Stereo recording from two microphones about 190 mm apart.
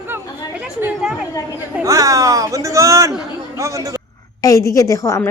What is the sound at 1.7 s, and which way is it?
A man's voice, 15° right (ahead or behind).